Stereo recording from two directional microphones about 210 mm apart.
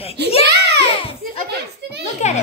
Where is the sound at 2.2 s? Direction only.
35° left (ahead or behind).